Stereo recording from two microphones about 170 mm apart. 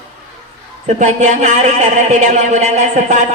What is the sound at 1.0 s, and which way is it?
Speech, 45° right (ahead or behind).